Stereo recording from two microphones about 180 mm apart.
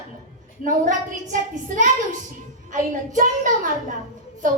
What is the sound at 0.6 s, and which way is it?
A woman's voice, 45° right (ahead or behind).